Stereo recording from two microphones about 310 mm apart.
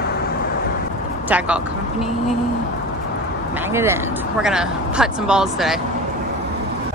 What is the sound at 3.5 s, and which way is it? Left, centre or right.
Speech, centre.